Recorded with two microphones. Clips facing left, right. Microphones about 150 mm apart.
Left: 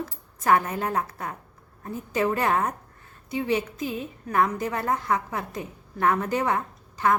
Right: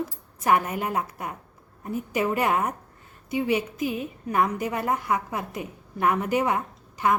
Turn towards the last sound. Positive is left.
turn(degrees=-15)  # may be behind; listen again after turning